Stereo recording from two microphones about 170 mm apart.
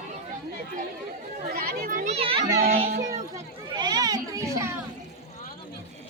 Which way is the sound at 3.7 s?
25° right (ahead or behind).